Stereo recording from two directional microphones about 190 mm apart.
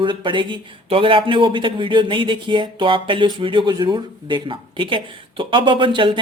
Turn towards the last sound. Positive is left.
turn(degrees=-25)  # may be behind; listen again after turning